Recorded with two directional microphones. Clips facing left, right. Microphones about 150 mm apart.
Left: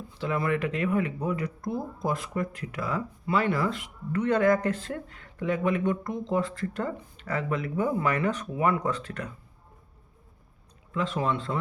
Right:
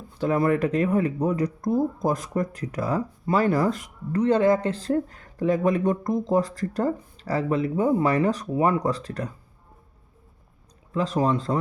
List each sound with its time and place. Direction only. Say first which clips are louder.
0.2 s speech: right 6 dB; 45° right (ahead or behind)
10.9 s speech: right 5 dB; 40° right (ahead or behind)